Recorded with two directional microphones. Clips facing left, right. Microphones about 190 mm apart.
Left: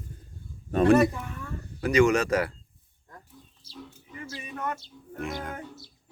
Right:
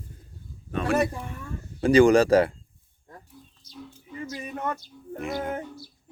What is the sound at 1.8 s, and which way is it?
Speech, 30° right (ahead or behind).